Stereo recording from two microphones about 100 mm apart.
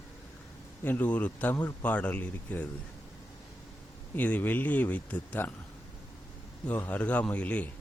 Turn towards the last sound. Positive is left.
turn(degrees=15)  # may be behind; listen again after turning